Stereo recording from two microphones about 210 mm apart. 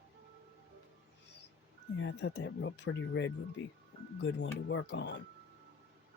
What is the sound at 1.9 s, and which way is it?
Speech, 60° left (ahead or behind).